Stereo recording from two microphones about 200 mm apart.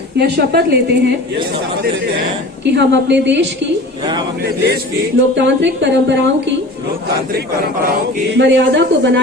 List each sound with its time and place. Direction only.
0.2 s a woman's voice: 55° right (ahead or behind)
2.6 s a woman's voice: 60° right (ahead or behind)
8.4 s speech: 65° right (ahead or behind)